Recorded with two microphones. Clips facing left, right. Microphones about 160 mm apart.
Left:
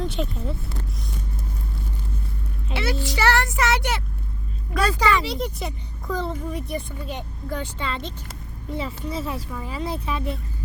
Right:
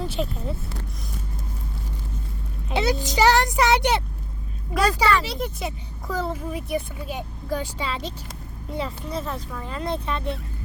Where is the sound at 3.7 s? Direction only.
20° right (ahead or behind).